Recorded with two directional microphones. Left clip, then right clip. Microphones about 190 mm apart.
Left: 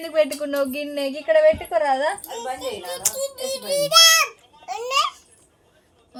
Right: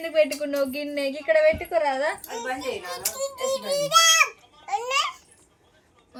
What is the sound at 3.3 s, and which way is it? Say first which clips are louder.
A child's voice: right 1 dB; 20° right (ahead or behind).